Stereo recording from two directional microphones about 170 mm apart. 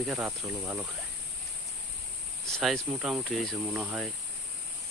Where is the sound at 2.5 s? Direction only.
Centre (ahead or behind).